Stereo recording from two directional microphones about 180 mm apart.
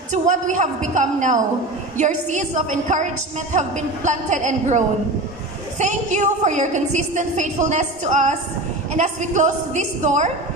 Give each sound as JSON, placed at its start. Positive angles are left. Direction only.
{"t": 0.1, "sound": "a woman's voice", "side_deg": -40}